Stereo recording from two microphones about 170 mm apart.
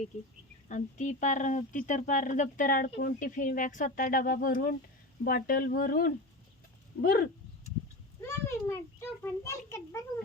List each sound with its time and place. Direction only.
0.7 s speech: 45° left (ahead or behind); by 7.3 s 65° left (ahead or behind)
8.2 s a child's voice: 15° left (ahead or behind)